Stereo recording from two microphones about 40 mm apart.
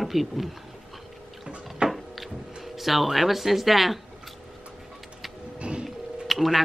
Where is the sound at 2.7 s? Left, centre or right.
Centre.